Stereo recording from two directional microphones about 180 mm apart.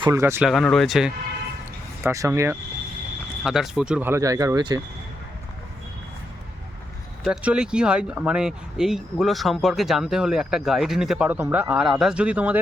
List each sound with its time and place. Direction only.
0.0 s speech: 15° right (ahead or behind)
0.5 s speech: centre (ahead or behind)
2.0 s speech: 15° right (ahead or behind)
3.4 s speech: centre (ahead or behind); by 4.8 s 20° right (ahead or behind)
7.3 s speech: 5° right (ahead or behind)